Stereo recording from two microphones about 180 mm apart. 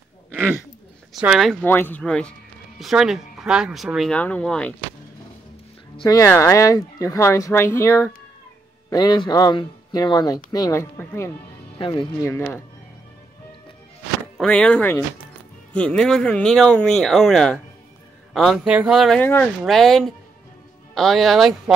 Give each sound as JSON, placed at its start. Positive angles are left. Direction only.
{"t": 1.1, "sound": "speech", "side_deg": -5}
{"t": 1.5, "sound": "speech", "side_deg": 10}
{"t": 5.9, "sound": "speech", "side_deg": 20}
{"t": 11.8, "sound": "speech", "side_deg": 25}
{"t": 14.4, "sound": "speech", "side_deg": 5}